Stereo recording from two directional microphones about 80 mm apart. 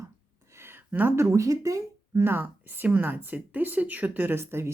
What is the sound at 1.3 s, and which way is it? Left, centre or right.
Speech, right.